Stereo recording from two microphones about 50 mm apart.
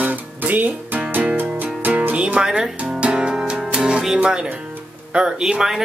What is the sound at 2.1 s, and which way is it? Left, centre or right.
Music, right.